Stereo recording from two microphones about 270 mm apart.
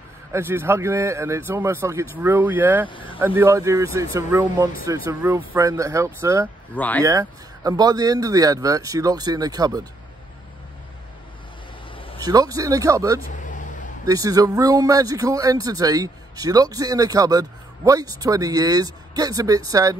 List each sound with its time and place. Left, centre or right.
0.3 s speech: centre
2.9 s speech: centre
3.2 s speech: centre
6.7 s speech: centre
7.0 s speech: centre
11.9 s a sound: centre
12.2 s speech: centre
13.2 s a sound: left
14.0 s speech: centre